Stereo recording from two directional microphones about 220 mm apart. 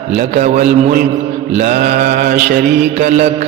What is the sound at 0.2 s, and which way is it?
A man's voice, 35° right (ahead or behind).